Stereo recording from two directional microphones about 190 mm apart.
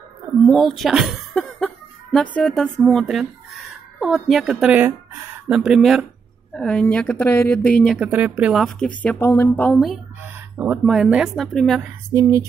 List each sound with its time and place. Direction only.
0.5 s speech: centre (ahead or behind)
10.2 s speech: 10° right (ahead or behind)
12.1 s speech: 15° right (ahead or behind)